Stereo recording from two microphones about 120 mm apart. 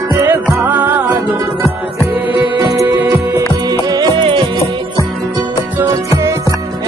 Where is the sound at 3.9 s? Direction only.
35° right (ahead or behind).